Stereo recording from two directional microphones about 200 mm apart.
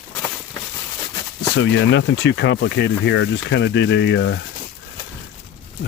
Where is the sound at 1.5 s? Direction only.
65° left (ahead or behind).